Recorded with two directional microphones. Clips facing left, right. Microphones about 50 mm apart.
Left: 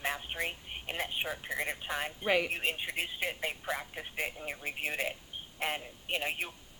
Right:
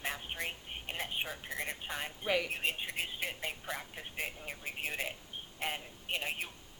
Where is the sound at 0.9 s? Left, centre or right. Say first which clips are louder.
Left 3 dB; left.